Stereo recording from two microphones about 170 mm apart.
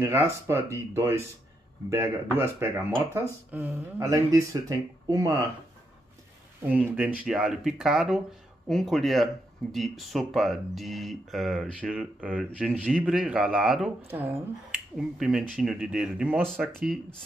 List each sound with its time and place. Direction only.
0.0 s speech: 15° right (ahead or behind)
6.6 s speech: 10° right (ahead or behind)